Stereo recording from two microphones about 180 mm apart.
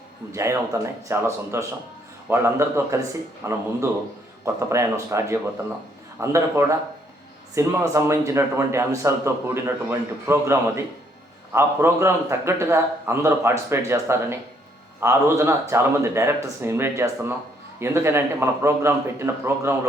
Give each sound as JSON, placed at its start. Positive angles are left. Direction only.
{"t": 0.3, "sound": "a man's voice", "side_deg": -15}